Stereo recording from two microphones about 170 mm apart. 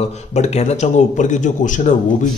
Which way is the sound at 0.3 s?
40° left (ahead or behind).